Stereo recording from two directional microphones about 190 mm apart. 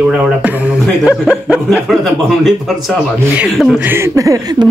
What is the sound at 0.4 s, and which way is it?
A woman's voice, 10° right (ahead or behind).